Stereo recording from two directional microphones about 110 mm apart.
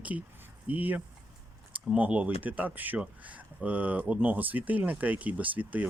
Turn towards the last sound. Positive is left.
turn(degrees=-15)  # may be behind; listen again after turning